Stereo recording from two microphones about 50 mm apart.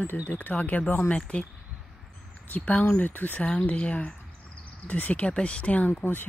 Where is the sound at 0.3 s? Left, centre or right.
Left.